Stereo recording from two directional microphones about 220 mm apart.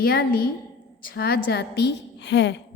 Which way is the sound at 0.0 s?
40° left (ahead or behind).